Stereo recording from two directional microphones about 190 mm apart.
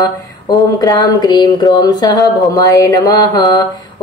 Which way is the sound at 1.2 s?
20° left (ahead or behind).